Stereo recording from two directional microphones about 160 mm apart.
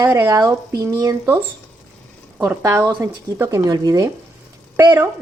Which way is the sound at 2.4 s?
15° right (ahead or behind).